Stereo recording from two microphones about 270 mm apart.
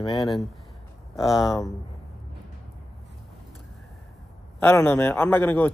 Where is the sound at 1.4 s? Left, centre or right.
Centre.